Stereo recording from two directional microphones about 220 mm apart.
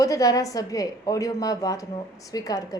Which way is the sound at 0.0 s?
15° left (ahead or behind).